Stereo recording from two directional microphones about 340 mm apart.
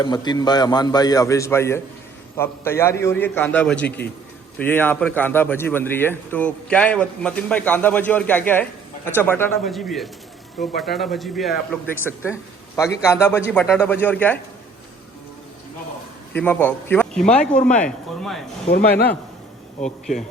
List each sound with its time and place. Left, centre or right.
0.0 s a man's voice: centre
16.3 s a man's voice: centre
18.7 s speech: left
19.8 s a man's voice: centre